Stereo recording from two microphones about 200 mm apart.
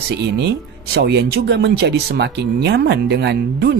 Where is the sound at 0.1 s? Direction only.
60° right (ahead or behind).